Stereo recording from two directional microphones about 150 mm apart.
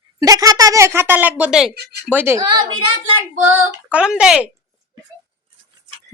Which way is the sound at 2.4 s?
25° right (ahead or behind).